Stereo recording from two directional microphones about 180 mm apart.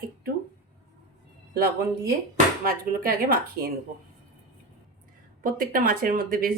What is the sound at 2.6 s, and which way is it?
Speech, 50° right (ahead or behind).